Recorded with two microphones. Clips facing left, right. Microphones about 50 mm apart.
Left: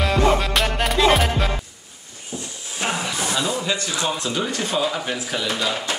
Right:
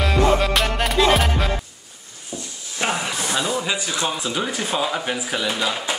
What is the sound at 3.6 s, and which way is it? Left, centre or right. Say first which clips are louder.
Speech: even; centre.